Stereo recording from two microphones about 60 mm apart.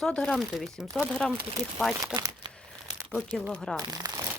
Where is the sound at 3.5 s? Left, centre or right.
Centre.